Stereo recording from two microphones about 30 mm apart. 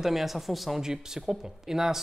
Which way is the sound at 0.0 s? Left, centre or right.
Centre.